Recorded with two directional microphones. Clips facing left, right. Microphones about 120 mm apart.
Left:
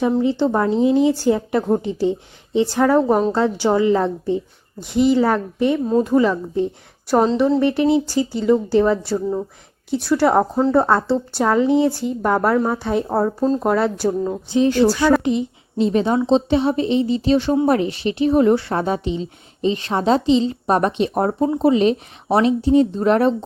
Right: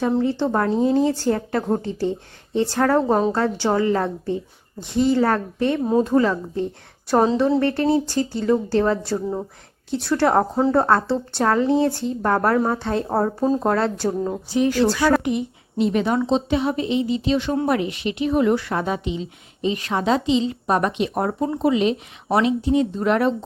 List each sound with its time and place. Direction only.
0.2 s speech: 15° left (ahead or behind)
13.1 s speech: centre (ahead or behind)
13.7 s speech: 10° left (ahead or behind)
14.1 s speech: 5° right (ahead or behind)
14.5 s a woman's voice: 25° left (ahead or behind)